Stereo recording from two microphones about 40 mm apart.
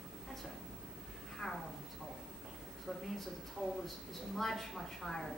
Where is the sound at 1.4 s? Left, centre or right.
Centre.